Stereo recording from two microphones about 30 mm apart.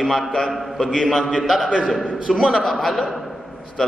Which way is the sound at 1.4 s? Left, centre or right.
Centre.